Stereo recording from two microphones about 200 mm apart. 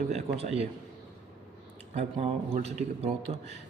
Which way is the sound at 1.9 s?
30° right (ahead or behind).